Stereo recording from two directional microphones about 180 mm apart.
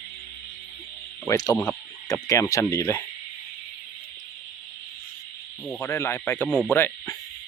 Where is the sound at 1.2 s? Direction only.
20° left (ahead or behind).